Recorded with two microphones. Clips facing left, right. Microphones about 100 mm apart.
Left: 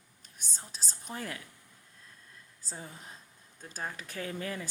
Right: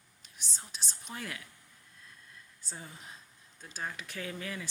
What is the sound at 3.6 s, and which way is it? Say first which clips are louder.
Speech: left 1 dB; 45° left (ahead or behind).